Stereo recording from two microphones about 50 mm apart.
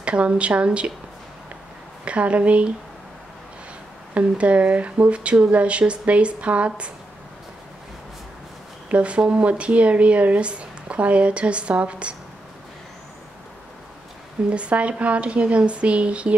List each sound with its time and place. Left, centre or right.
0.0 s speech: right
2.0 s speech: right
4.1 s speech: right
8.9 s speech: right
14.5 s speech: right